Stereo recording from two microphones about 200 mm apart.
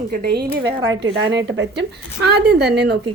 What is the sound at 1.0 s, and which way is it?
Speech, 70° right (ahead or behind).